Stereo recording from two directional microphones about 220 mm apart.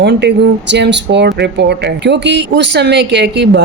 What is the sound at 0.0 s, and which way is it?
Speech, 50° right (ahead or behind).